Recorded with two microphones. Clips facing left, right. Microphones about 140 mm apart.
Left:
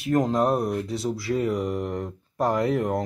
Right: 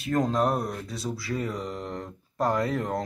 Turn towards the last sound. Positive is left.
turn(degrees=15)  # may be behind; listen again after turning